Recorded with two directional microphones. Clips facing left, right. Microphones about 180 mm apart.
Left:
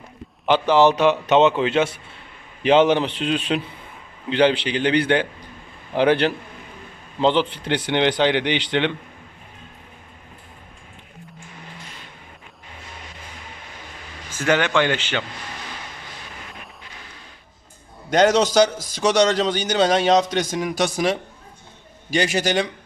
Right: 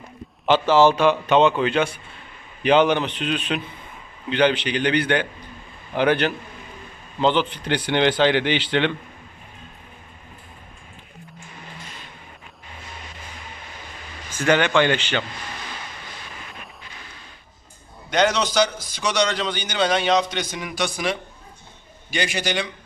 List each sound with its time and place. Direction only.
0.4 s speech: 15° left (ahead or behind)
14.3 s speech: 5° left (ahead or behind)
18.1 s a man's voice: 45° left (ahead or behind)